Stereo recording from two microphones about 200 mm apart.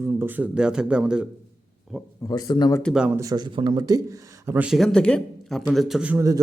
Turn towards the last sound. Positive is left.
turn(degrees=-15)  # may be behind; listen again after turning